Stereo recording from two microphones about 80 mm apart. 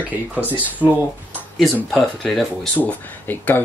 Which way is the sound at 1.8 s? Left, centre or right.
Centre.